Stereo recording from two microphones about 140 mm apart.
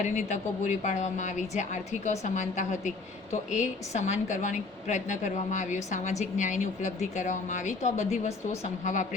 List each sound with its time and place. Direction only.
0.0 s a woman's voice: 60° left (ahead or behind)